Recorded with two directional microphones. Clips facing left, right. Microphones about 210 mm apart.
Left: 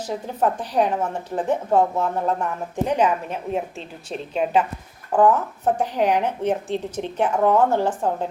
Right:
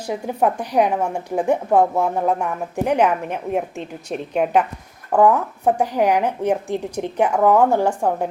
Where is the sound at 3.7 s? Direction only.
65° right (ahead or behind).